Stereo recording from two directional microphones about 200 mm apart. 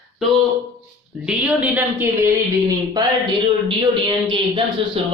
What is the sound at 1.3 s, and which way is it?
A woman's voice, 5° right (ahead or behind).